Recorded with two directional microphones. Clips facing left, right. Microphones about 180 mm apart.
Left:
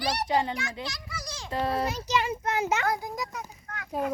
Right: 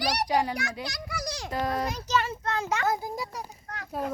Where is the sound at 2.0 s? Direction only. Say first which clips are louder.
Even; 10° left (ahead or behind).